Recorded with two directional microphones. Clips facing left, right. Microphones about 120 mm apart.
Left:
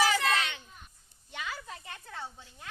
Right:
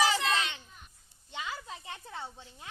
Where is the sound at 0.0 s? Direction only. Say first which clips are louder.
Left 1 dB; 25° right (ahead or behind).